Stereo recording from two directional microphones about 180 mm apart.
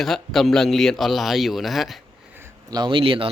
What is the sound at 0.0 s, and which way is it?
A man's voice, centre (ahead or behind).